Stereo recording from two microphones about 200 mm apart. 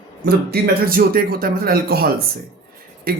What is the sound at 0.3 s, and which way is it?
Speech, 50° right (ahead or behind).